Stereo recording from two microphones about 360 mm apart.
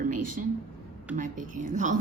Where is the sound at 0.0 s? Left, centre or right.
Right.